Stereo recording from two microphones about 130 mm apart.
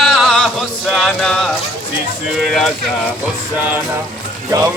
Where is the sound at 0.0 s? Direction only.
Centre (ahead or behind).